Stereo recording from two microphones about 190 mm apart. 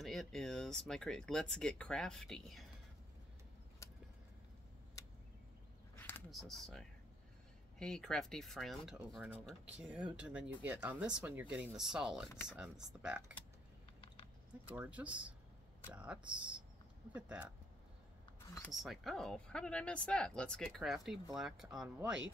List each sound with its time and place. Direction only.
0.0 s speech: centre (ahead or behind)
3.8 s vehicle: 15° left (ahead or behind)
5.9 s a sound: 10° left (ahead or behind)
6.3 s speech: centre (ahead or behind)
14.7 s speech: 5° right (ahead or behind)
18.6 s speech: centre (ahead or behind)